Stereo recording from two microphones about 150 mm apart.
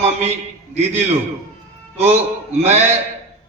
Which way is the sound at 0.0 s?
45° right (ahead or behind).